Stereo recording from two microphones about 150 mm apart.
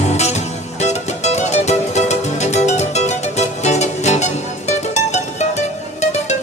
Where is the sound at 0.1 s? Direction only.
45° left (ahead or behind).